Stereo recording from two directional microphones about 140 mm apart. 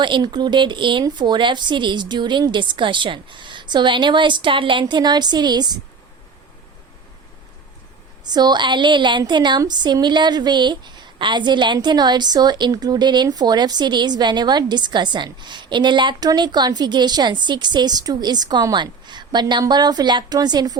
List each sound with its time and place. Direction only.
0.0 s a woman's voice: 35° right (ahead or behind)
8.2 s a woman's voice: 30° right (ahead or behind)